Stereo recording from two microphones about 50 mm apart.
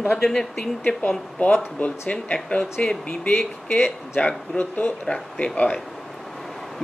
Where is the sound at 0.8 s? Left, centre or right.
Left.